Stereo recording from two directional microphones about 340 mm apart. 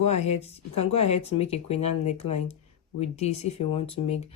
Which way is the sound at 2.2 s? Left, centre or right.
Left.